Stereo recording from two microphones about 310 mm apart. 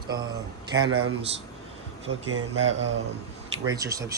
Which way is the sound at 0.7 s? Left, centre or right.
Centre.